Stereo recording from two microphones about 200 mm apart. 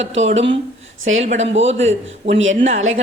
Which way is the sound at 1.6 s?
70° right (ahead or behind).